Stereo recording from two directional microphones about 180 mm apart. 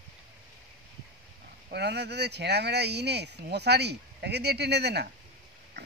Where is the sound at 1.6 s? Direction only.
70° right (ahead or behind).